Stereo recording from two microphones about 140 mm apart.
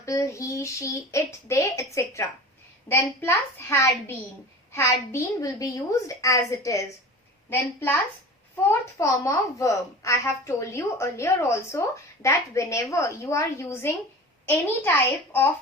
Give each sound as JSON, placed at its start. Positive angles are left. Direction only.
{"t": 0.0, "sound": "a woman's voice", "side_deg": 20}
{"t": 9.0, "sound": "a woman's voice", "side_deg": 20}